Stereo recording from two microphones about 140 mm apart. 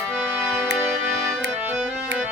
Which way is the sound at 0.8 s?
20° right (ahead or behind).